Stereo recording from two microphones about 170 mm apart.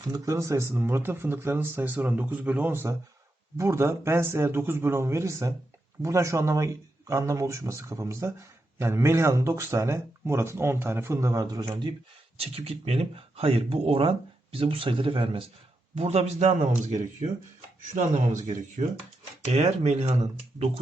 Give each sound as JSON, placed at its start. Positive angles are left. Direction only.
{"t": 0.0, "sound": "speech", "side_deg": -20}